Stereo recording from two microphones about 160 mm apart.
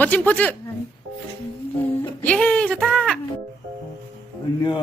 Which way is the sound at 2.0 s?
10° left (ahead or behind).